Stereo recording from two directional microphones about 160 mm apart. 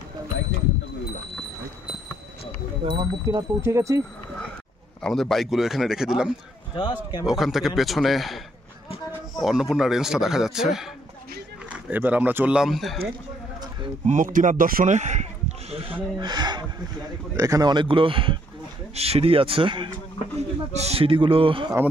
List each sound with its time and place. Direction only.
3.3 s speech: 20° right (ahead or behind)
5.0 s a man's voice: centre (ahead or behind)
9.4 s a man's voice: centre (ahead or behind)
14.0 s speech: 55° right (ahead or behind); by 21.7 s 35° right (ahead or behind)